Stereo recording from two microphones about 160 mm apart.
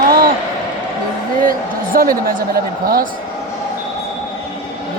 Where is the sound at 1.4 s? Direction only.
60° right (ahead or behind).